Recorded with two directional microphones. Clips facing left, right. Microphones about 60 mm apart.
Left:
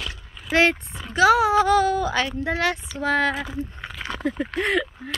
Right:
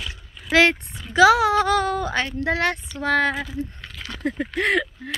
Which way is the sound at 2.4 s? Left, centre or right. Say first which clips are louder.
Right 1 dB; right.